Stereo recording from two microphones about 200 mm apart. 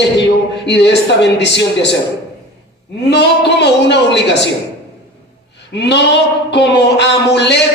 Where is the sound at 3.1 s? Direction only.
60° left (ahead or behind).